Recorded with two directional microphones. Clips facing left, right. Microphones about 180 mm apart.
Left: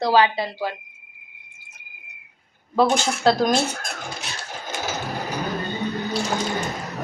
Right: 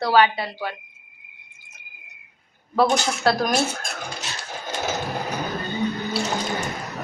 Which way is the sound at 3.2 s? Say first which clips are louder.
Left 4 dB; 20° left (ahead or behind).